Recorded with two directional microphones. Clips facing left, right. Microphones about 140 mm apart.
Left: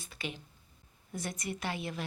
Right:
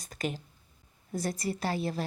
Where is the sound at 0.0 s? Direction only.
45° right (ahead or behind).